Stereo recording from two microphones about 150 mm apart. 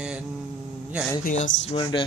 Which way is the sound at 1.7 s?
35° left (ahead or behind).